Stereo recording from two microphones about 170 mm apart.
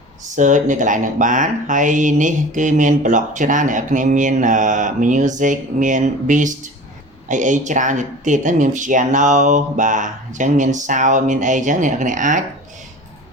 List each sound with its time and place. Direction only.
0.3 s speech: 45° right (ahead or behind)